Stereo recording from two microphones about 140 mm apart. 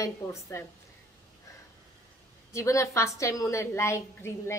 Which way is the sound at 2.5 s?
20° left (ahead or behind).